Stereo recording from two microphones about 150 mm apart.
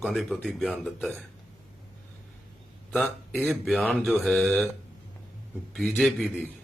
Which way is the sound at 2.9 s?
Centre (ahead or behind).